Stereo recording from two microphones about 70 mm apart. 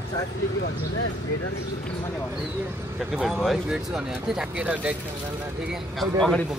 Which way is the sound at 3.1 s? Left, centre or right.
Centre.